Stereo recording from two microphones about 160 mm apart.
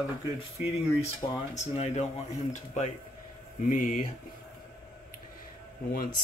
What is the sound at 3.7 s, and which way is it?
Speech, 55° left (ahead or behind).